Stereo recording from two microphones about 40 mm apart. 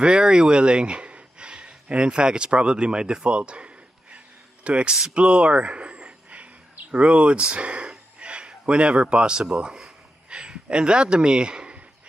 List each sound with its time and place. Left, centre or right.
0.0 s speech: right
5.1 s a sound: right
10.3 s speech: right